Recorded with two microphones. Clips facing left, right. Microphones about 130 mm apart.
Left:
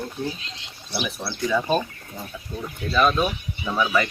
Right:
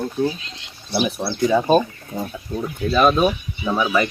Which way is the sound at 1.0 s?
35° right (ahead or behind).